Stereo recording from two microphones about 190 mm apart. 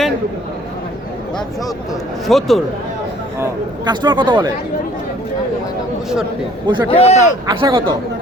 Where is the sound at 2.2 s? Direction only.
Centre (ahead or behind).